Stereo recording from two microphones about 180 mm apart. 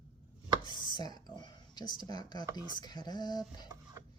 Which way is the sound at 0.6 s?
25° left (ahead or behind).